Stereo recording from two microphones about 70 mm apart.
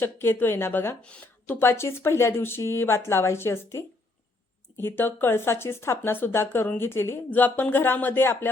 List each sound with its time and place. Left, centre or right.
0.0 s speech: left